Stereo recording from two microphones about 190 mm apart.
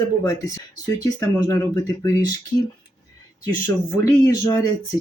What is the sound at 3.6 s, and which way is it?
Speech, 15° left (ahead or behind).